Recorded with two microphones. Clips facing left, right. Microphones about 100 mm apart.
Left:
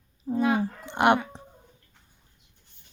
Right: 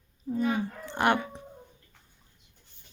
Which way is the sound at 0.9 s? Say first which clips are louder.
Left 4 dB; 20° left (ahead or behind).